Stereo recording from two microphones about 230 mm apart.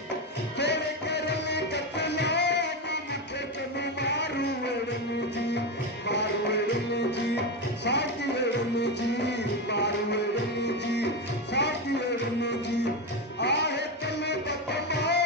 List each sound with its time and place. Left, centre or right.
0.6 s music: left
6.0 s music: left
11.6 s music: left
13.4 s music: left